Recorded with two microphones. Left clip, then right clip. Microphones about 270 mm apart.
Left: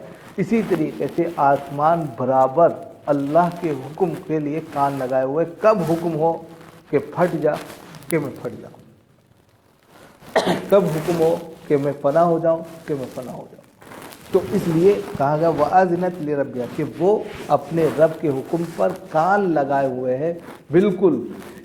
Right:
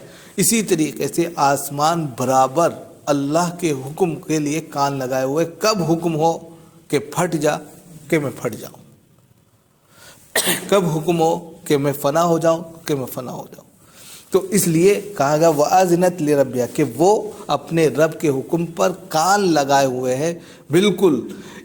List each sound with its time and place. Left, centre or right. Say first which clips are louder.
0.3 s speech: right 2 dB; right
10.3 s a sound: left 1 dB; right
11.7 s speech: even; right
14.8 s speech: even; right